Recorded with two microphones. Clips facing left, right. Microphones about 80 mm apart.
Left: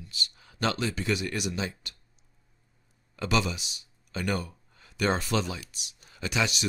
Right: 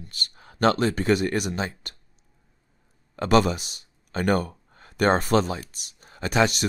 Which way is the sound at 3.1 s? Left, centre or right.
Right.